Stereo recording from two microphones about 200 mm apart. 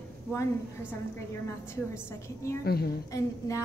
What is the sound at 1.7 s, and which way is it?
Speech, 15° left (ahead or behind).